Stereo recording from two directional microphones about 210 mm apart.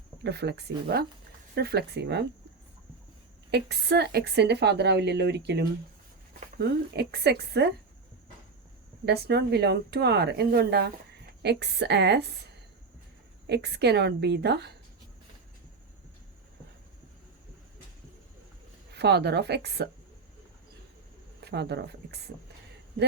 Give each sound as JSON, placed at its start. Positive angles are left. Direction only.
{"t": 0.2, "sound": "a woman's voice", "side_deg": -55}
{"t": 3.5, "sound": "a woman's voice", "side_deg": -50}
{"t": 9.0, "sound": "a woman's voice", "side_deg": -50}
{"t": 13.5, "sound": "a woman's voice", "side_deg": -50}
{"t": 18.9, "sound": "a woman's voice", "side_deg": -50}
{"t": 21.4, "sound": "a woman's voice", "side_deg": -50}